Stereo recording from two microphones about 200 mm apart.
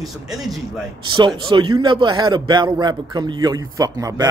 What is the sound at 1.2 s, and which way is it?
A man's voice, 25° right (ahead or behind).